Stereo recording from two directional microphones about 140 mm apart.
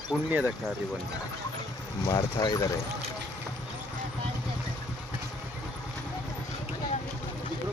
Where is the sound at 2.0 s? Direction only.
30° left (ahead or behind).